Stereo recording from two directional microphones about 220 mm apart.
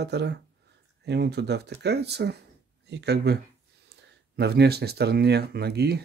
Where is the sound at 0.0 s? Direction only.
50° right (ahead or behind).